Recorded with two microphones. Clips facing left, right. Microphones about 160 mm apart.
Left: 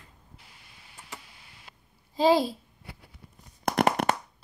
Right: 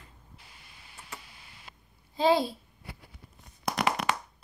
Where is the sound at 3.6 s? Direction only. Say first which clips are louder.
Left 5 dB; 55° left (ahead or behind).